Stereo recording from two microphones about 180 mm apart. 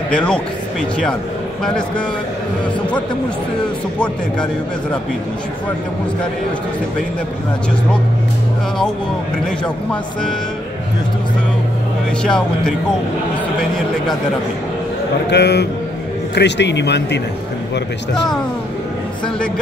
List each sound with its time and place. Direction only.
0.1 s speech: 5° left (ahead or behind)
12.2 s speech: 5° left (ahead or behind)
15.2 s speech: 70° left (ahead or behind)